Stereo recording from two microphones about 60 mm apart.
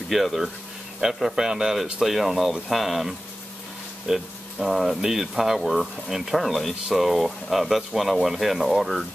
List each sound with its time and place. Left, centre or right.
0.1 s speech: centre